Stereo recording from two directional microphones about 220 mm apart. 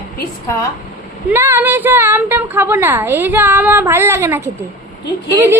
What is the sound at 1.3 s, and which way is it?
A woman's voice, 10° right (ahead or behind).